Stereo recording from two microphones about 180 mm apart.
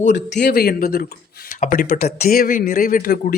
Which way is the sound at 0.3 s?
65° left (ahead or behind).